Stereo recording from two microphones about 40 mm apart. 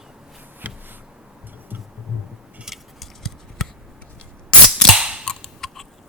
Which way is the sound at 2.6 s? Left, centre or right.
Centre.